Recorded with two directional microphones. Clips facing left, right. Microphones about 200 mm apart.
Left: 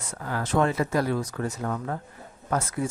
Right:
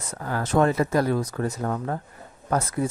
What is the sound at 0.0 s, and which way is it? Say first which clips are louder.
Speech: right 2 dB; 40° right (ahead or behind).